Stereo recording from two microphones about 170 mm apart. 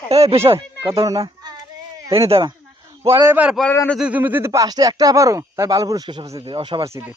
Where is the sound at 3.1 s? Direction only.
15° right (ahead or behind).